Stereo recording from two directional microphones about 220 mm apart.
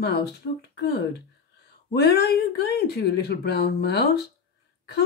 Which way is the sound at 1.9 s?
45° left (ahead or behind).